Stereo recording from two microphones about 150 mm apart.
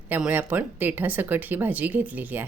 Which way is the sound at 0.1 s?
10° right (ahead or behind).